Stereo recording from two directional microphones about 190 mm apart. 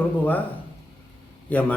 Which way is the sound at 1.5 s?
10° left (ahead or behind).